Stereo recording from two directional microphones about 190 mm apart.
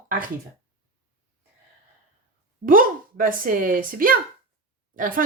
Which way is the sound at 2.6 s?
45° right (ahead or behind).